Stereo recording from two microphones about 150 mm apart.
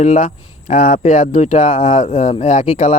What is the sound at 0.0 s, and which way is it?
A man's voice, 55° left (ahead or behind).